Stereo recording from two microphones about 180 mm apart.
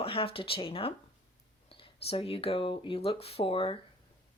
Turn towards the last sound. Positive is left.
turn(degrees=30)  # may be behind; listen again after turning